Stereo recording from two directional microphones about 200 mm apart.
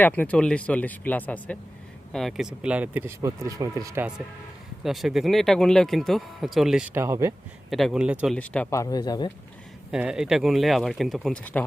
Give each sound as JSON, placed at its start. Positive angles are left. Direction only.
{"t": 0.0, "sound": "speech", "side_deg": 10}
{"t": 4.8, "sound": "speech", "side_deg": 0}
{"t": 7.7, "sound": "speech", "side_deg": 0}
{"t": 8.4, "sound": "speech", "side_deg": 5}
{"t": 8.8, "sound": "speech", "side_deg": 20}
{"t": 9.9, "sound": "speech", "side_deg": -5}